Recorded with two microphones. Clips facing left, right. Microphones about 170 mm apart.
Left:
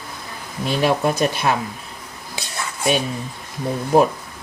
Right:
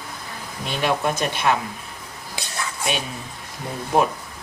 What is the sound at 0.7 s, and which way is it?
Speech, 40° left (ahead or behind).